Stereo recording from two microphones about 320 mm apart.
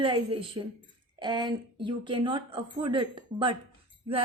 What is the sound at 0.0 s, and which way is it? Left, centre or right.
Speech, centre.